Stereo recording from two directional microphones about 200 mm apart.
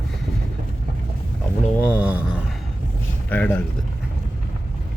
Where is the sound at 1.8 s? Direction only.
10° right (ahead or behind).